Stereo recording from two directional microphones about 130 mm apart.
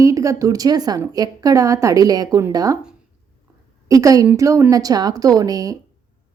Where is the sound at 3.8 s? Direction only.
25° right (ahead or behind).